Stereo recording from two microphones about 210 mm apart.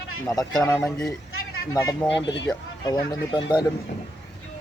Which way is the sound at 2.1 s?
55° left (ahead or behind).